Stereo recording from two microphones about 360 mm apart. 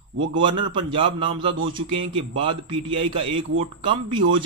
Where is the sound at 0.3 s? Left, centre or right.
Centre.